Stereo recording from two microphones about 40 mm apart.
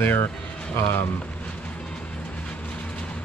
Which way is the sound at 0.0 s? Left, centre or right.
Left.